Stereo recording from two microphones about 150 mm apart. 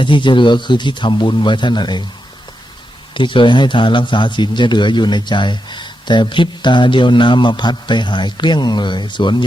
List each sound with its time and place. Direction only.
0.0 s a man's voice: 35° left (ahead or behind)
3.2 s a man's voice: 35° left (ahead or behind)